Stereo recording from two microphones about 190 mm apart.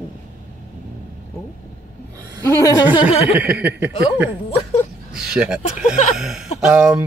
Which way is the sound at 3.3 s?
5° right (ahead or behind).